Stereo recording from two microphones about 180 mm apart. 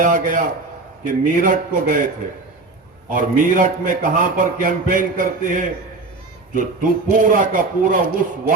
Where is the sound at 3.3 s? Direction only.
45° right (ahead or behind).